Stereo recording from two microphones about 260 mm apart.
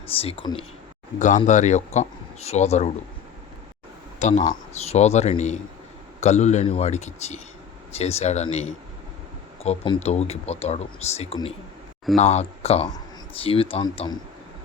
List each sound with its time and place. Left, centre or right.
0.2 s speech: left
4.2 s speech: left